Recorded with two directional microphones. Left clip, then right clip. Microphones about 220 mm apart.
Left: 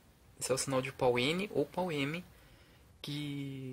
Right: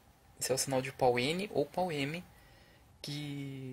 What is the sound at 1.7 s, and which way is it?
Speech, 35° left (ahead or behind).